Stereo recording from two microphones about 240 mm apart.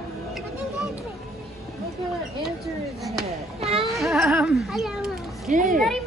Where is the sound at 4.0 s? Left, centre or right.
Centre.